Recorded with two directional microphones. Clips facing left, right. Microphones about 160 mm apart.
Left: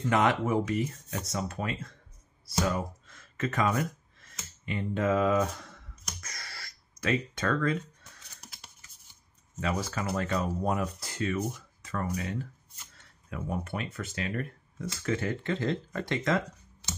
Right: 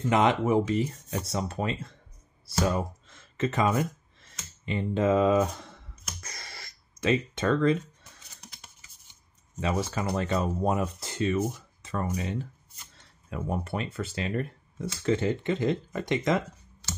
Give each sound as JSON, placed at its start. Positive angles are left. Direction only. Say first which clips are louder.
{"t": 0.0, "sound": "speech", "louder": "right 2 dB", "side_deg": -20}
{"t": 6.2, "sound": "a sound", "louder": "right 1 dB", "side_deg": -25}
{"t": 8.4, "sound": "typing", "louder": "right 1 dB", "side_deg": 5}
{"t": 9.6, "sound": "speech", "louder": "right 3 dB", "side_deg": -25}